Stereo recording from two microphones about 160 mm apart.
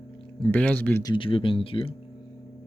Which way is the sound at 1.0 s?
30° left (ahead or behind).